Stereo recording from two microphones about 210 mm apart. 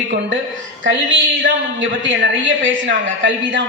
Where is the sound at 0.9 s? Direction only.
60° right (ahead or behind).